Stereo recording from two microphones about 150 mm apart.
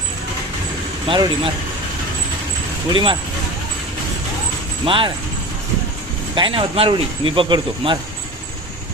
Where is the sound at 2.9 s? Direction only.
35° right (ahead or behind).